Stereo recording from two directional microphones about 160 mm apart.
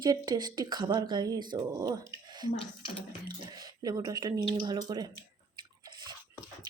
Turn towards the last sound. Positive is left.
turn(degrees=-25)  # may be behind; listen again after turning